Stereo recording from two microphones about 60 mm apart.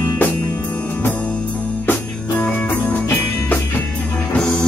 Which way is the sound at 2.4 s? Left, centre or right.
Left.